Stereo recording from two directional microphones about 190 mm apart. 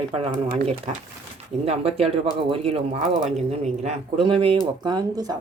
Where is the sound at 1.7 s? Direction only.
30° right (ahead or behind).